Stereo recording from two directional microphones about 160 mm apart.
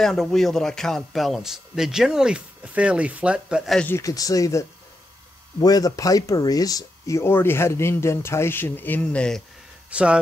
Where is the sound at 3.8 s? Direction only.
20° left (ahead or behind).